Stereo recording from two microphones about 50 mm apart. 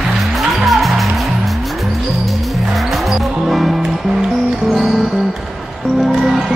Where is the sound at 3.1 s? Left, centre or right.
Centre.